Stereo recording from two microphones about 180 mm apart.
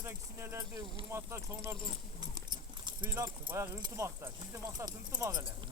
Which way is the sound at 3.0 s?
10° right (ahead or behind).